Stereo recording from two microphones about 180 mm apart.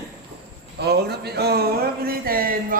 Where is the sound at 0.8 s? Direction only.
65° right (ahead or behind).